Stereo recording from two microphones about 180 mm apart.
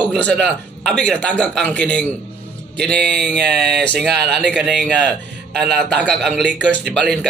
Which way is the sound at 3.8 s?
Centre (ahead or behind).